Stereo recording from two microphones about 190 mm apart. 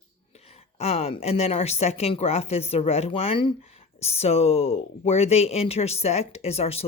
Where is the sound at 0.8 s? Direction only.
30° left (ahead or behind).